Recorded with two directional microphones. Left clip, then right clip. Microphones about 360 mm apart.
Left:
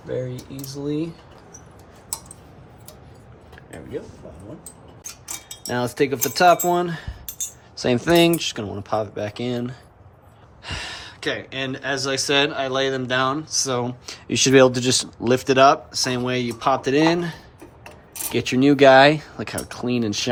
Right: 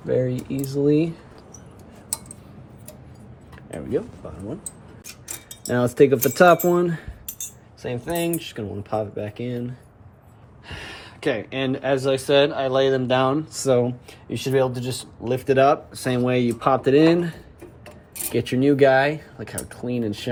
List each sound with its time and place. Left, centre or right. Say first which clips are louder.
0.8 s speech: right 8 dB; centre
5.6 s speech: right 5 dB; centre
7.9 s speech: left 9 dB; left
8.4 s speech: left 4 dB; centre
14.1 s speech: left 7 dB; centre
15.3 s speech: left 3 dB; centre